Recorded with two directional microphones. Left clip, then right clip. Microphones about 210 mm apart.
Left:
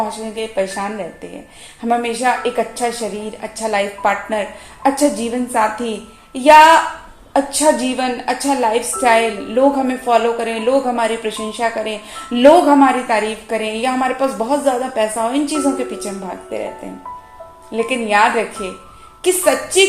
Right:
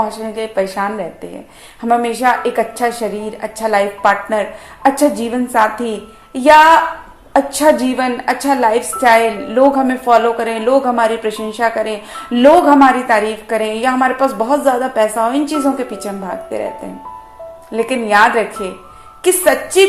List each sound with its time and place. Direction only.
0.3 s a woman's voice: 20° right (ahead or behind)
17.7 s a woman's voice: 20° right (ahead or behind)